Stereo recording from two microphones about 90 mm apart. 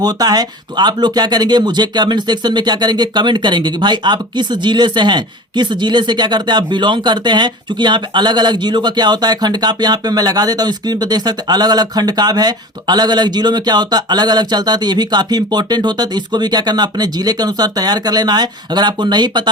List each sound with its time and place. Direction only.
0.0 s speech: 45° right (ahead or behind)